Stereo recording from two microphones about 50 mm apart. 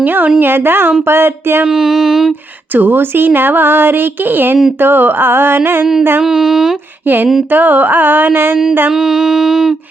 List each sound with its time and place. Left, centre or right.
0.0 s speech: right
1.6 s music: centre
2.7 s speech: right
6.2 s music: centre
7.0 s a sound: right
8.9 s music: centre